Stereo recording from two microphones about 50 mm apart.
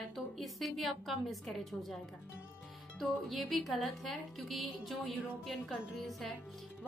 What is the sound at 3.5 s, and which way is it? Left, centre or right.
A woman's voice, centre.